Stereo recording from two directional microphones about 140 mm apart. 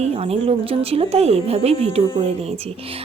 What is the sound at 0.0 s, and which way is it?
A woman's voice, 45° right (ahead or behind).